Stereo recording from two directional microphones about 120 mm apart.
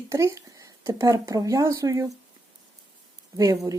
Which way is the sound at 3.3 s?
30° right (ahead or behind).